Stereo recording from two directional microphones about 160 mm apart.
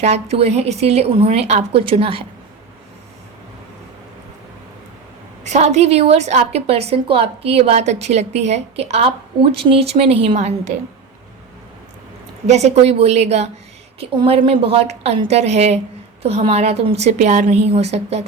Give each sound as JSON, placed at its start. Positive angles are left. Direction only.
{"t": 0.0, "sound": "a woman's voice", "side_deg": -40}
{"t": 5.4, "sound": "a woman's voice", "side_deg": -45}
{"t": 12.5, "sound": "a woman's voice", "side_deg": -45}